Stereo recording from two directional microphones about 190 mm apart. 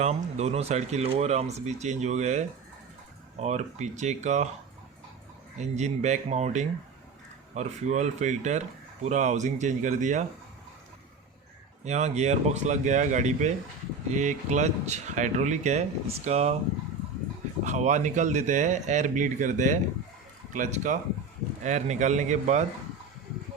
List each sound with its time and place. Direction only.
0.0 s speech: 35° right (ahead or behind)
5.5 s speech: 35° right (ahead or behind)
11.9 s speech: 35° right (ahead or behind)
17.6 s speech: 40° right (ahead or behind)